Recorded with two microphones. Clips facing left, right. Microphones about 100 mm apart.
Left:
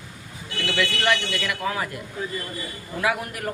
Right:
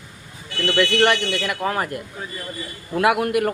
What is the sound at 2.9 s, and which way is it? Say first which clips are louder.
Speech: right 8 dB; 85° right.